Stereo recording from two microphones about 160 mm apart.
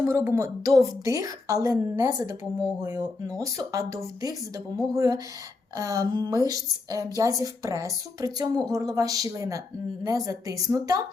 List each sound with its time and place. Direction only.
0.0 s a woman's voice: 15° right (ahead or behind)